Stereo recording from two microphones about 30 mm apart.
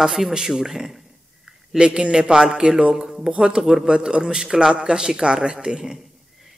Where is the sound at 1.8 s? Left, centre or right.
Right.